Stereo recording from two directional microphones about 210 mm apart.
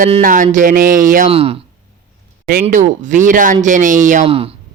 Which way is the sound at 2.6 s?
35° right (ahead or behind).